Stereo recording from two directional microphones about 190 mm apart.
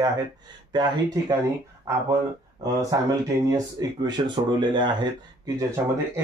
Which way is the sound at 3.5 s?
20° right (ahead or behind).